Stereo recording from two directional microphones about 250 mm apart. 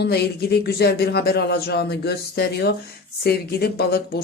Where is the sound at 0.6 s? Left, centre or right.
Left.